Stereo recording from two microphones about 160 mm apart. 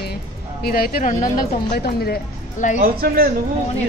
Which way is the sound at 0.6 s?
70° left (ahead or behind).